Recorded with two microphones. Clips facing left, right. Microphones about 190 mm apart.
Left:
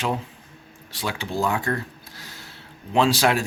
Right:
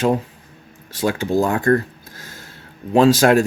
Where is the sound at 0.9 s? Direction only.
45° right (ahead or behind).